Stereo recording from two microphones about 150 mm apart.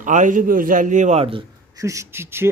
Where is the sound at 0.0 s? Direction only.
55° right (ahead or behind); by 1.5 s 40° right (ahead or behind).